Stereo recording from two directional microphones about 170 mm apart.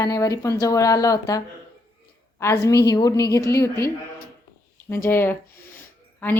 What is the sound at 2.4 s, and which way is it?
A woman's voice, 20° left (ahead or behind).